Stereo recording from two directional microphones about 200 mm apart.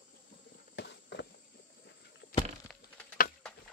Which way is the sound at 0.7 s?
60° left (ahead or behind).